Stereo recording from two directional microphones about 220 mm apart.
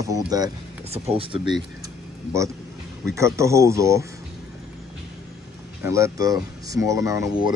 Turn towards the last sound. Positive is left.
turn(degrees=-15)  # may be behind; listen again after turning